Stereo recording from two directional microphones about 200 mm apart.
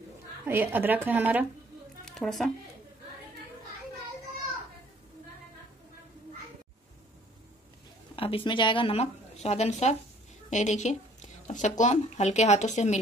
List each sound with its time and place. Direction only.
0.5 s speech: 10° right (ahead or behind)
2.0 s speech: centre (ahead or behind)
8.2 s a woman's voice: 25° left (ahead or behind)